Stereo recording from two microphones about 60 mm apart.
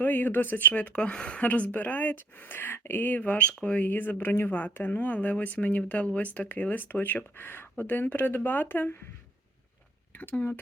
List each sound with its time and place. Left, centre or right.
0.0 s speech: left
10.2 s speech: left